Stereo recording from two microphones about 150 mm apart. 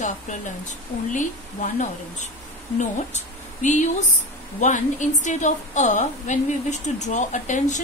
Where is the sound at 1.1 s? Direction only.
55° left (ahead or behind).